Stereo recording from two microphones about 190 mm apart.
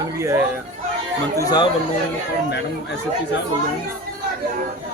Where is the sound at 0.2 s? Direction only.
15° right (ahead or behind).